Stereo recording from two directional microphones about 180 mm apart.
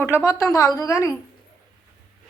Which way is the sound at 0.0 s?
15° left (ahead or behind).